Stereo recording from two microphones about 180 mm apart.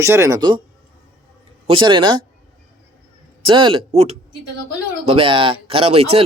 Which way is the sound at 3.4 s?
30° right (ahead or behind).